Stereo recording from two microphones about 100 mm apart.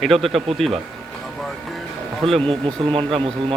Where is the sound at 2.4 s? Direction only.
65° right (ahead or behind).